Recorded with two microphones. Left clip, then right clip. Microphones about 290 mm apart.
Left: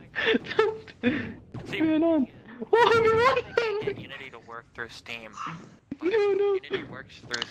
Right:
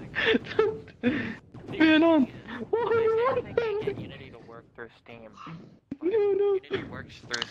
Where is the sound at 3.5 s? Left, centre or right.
Left.